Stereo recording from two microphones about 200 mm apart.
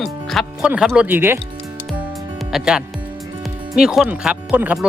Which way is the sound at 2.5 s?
5° right (ahead or behind).